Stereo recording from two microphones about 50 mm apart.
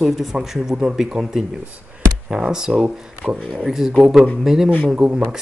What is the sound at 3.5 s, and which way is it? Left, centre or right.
Speech, centre.